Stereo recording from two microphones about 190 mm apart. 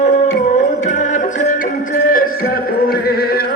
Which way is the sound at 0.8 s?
40° left (ahead or behind).